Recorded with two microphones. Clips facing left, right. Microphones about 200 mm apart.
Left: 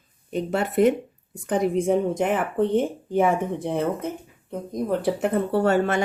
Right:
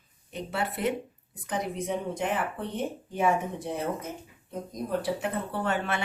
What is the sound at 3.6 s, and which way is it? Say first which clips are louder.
Speech: left 7 dB; 60° left (ahead or behind).